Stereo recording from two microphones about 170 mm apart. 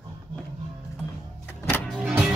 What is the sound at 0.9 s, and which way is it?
Power windows, 10° left (ahead or behind).